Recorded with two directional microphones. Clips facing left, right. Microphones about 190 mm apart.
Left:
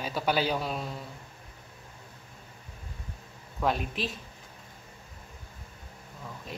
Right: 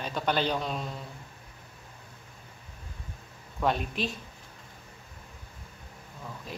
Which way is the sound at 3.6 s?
Centre (ahead or behind).